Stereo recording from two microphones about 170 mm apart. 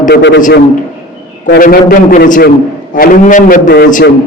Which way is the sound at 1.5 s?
60° left (ahead or behind).